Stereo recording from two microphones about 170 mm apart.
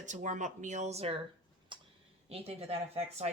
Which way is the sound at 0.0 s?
45° right (ahead or behind).